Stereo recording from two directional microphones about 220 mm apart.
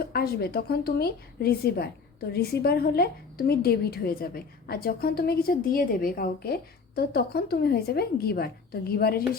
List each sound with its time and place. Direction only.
0.0 s a woman's voice: 45° left (ahead or behind)